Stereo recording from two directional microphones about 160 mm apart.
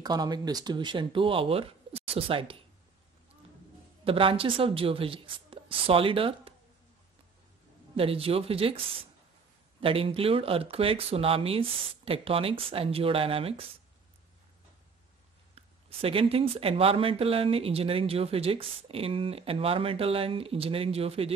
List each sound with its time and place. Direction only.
0.0 s speech: 25° right (ahead or behind)
4.0 s speech: 35° right (ahead or behind)
7.9 s speech: 35° right (ahead or behind)
15.5 s speech: 35° right (ahead or behind)